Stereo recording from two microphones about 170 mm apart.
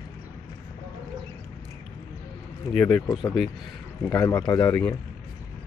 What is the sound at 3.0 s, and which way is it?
Speech, 15° left (ahead or behind).